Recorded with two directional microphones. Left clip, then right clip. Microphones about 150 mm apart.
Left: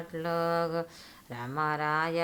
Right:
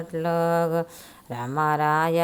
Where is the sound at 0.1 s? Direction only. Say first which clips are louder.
Right 7 dB; 30° right (ahead or behind).